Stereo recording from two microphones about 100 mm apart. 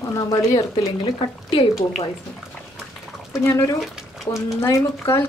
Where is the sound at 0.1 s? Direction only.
35° left (ahead or behind).